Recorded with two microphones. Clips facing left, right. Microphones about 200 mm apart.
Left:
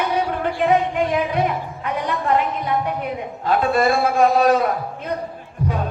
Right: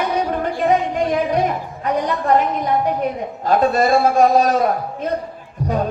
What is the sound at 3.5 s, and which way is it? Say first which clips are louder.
A man's voice: right 2 dB; 40° right (ahead or behind).